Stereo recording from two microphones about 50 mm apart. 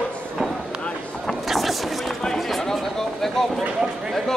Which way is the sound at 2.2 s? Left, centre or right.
Centre.